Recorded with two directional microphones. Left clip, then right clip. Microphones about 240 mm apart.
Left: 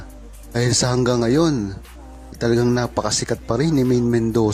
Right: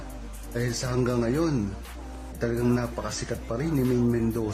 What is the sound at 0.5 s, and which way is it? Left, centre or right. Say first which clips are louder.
Speech: left 10 dB; left.